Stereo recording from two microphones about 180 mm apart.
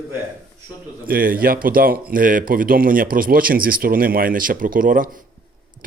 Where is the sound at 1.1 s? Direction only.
55° right (ahead or behind).